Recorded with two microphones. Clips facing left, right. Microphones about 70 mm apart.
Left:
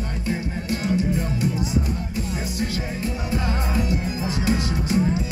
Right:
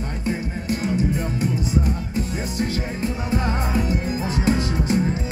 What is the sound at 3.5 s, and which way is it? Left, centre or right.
Music, right.